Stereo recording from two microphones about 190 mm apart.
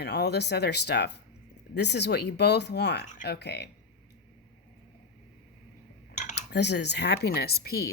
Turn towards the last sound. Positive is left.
turn(degrees=55)  # may be behind; listen again after turning